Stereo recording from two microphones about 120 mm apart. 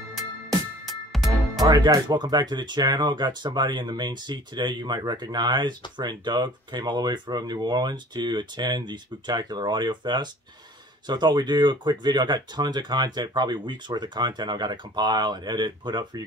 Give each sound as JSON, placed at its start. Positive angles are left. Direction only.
{"t": 0.8, "sound": "music", "side_deg": 0}
{"t": 1.7, "sound": "speech", "side_deg": -35}